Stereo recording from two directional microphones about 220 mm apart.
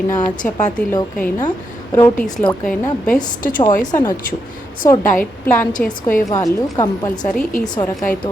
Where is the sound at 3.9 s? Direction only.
20° left (ahead or behind).